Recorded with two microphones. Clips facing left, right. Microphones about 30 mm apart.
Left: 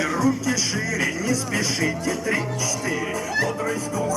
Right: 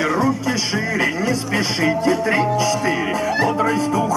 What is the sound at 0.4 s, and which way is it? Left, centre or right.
Music, right.